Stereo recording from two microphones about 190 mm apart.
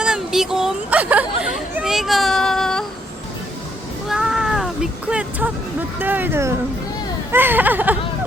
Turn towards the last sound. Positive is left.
turn(degrees=-10)  # may be behind; listen again after turning